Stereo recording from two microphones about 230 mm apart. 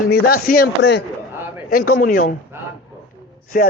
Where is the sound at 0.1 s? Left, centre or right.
Left.